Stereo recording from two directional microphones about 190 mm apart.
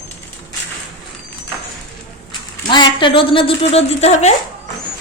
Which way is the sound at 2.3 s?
25° left (ahead or behind).